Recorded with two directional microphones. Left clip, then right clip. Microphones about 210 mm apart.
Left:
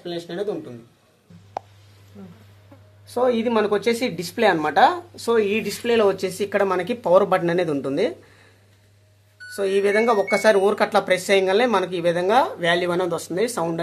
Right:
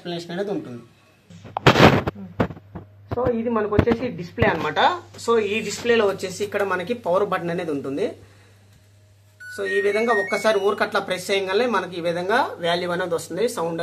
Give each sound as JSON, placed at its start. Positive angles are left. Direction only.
{"t": 0.0, "sound": "speech", "side_deg": 15}
{"t": 3.2, "sound": "speech", "side_deg": 60}
{"t": 9.6, "sound": "speech", "side_deg": 55}